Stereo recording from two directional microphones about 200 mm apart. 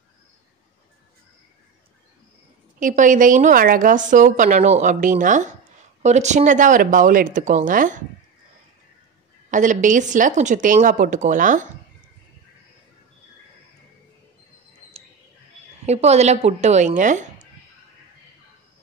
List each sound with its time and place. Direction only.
2.8 s a woman's voice: 40° right (ahead or behind)
9.5 s a woman's voice: 40° right (ahead or behind)
15.8 s a woman's voice: 35° right (ahead or behind)